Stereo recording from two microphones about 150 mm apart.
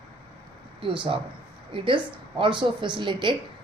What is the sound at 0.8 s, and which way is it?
A woman's voice, 35° right (ahead or behind).